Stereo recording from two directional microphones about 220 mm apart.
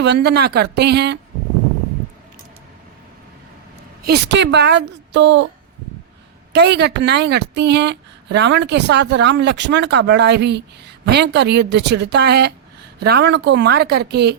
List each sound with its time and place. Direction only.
0.0 s a woman's voice: 50° right (ahead or behind)
4.0 s a woman's voice: 50° right (ahead or behind)
6.5 s a woman's voice: 50° right (ahead or behind)